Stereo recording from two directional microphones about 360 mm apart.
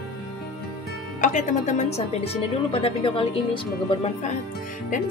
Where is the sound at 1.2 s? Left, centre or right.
Centre.